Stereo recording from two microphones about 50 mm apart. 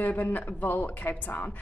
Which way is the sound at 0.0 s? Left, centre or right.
Left.